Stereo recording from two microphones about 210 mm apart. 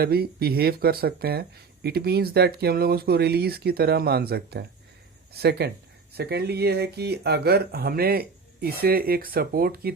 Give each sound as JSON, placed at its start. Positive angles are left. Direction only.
{"t": 0.0, "sound": "speech", "side_deg": -50}